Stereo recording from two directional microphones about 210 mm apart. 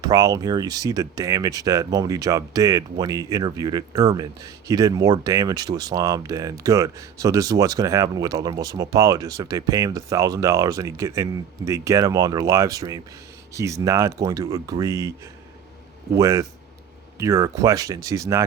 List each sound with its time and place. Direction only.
0.0 s speech: 15° right (ahead or behind)
16.1 s speech: 15° right (ahead or behind)